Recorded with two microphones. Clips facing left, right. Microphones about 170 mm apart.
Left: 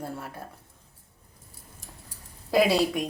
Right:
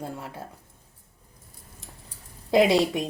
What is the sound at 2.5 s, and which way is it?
Speech, 20° right (ahead or behind).